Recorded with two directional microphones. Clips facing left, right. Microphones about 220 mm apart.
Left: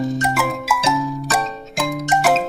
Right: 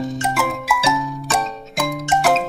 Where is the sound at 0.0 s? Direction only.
Centre (ahead or behind).